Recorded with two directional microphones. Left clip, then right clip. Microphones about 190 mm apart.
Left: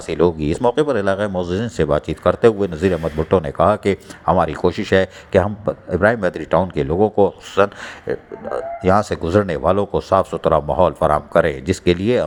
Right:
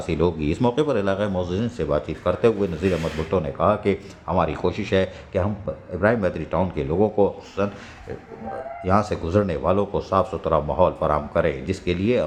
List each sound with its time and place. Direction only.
0.0 s speech: 30° left (ahead or behind)
8.8 s speech: 35° left (ahead or behind)